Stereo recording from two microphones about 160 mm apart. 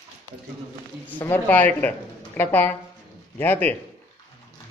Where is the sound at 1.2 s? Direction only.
15° left (ahead or behind).